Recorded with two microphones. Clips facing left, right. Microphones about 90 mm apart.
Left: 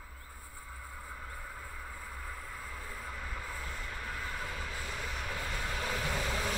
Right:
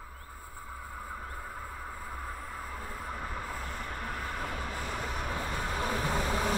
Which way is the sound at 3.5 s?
50° right (ahead or behind).